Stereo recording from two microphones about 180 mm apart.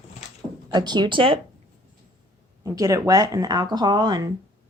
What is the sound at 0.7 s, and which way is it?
Speech, 25° right (ahead or behind).